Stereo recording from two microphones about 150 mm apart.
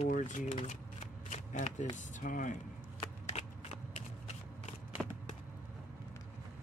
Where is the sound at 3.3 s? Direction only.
50° left (ahead or behind).